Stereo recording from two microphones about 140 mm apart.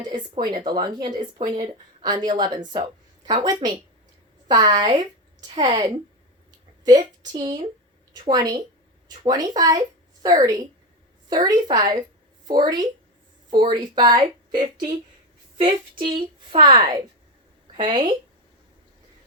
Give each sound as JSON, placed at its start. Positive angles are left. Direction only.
{"t": 0.0, "sound": "a woman's voice", "side_deg": -30}